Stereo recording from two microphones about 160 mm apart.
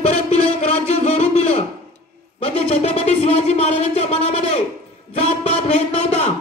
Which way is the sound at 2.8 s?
40° left (ahead or behind).